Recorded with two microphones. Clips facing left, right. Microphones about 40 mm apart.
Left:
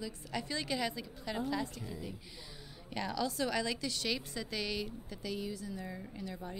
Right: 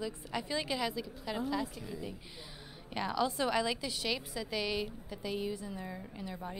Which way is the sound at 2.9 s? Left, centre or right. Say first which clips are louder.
Right 3 dB; centre.